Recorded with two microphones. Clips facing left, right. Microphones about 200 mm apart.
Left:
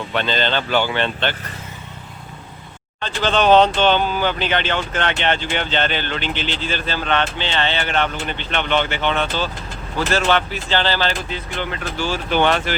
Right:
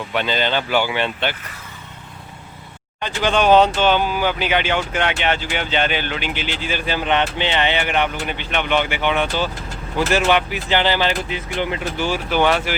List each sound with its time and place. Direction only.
0.1 s speech: 10° right (ahead or behind)
3.0 s speech: 10° right (ahead or behind)